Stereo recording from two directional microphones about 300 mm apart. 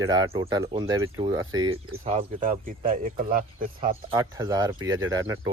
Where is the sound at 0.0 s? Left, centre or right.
Centre.